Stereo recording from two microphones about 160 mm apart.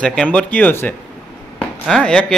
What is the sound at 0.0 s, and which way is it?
A man's voice, 5° left (ahead or behind).